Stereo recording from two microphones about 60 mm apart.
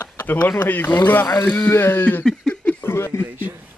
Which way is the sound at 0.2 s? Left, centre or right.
Left.